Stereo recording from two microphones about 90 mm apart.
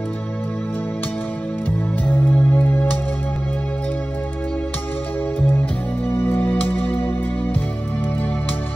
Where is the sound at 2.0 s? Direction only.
20° left (ahead or behind).